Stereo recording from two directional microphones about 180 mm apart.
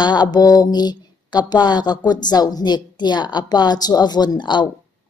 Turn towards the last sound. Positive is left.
turn(degrees=25)  # may be behind; listen again after turning